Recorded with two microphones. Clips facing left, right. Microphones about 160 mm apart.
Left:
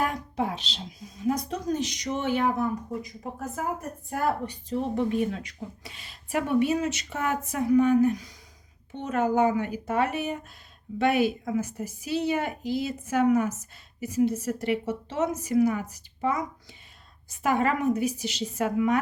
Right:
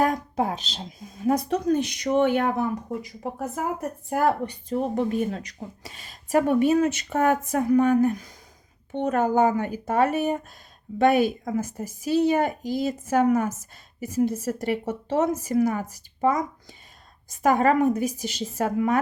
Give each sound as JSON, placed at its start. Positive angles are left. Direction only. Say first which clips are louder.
{"t": 0.0, "sound": "speech", "louder": "right 5 dB", "side_deg": -40}
{"t": 4.1, "sound": "speech", "louder": "right 5 dB", "side_deg": -60}
{"t": 5.3, "sound": "speech", "louder": "right 2 dB", "side_deg": -40}